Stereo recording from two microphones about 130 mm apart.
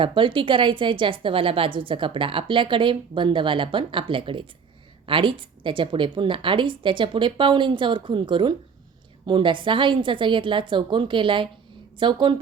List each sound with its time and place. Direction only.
0.0 s a woman's voice: 40° right (ahead or behind)